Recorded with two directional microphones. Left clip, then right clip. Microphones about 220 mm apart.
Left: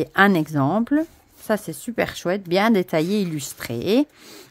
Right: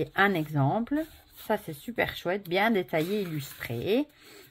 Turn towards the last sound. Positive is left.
turn(degrees=50)  # may be behind; listen again after turning